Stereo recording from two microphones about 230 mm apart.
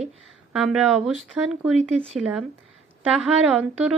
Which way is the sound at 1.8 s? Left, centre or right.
Right.